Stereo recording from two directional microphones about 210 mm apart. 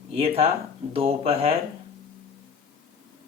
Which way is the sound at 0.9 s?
25° right (ahead or behind).